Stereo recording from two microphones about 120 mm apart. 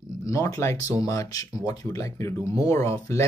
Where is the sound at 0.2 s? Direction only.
25° left (ahead or behind).